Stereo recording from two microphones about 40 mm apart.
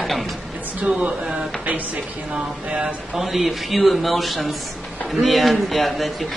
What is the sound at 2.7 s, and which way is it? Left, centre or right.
Speech, right.